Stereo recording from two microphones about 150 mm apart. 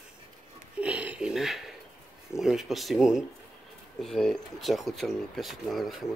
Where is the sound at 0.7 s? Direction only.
10° right (ahead or behind).